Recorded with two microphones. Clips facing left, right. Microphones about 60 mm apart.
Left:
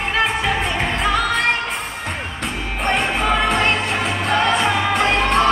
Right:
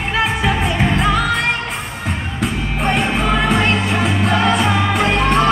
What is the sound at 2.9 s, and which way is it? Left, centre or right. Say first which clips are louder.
Music: right 1 dB; centre.